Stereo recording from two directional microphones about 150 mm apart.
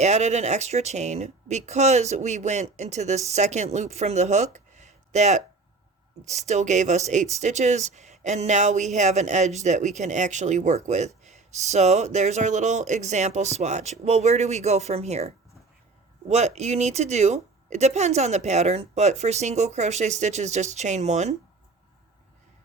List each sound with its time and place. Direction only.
0.0 s speech: 50° right (ahead or behind)
16.3 s speech: 45° right (ahead or behind)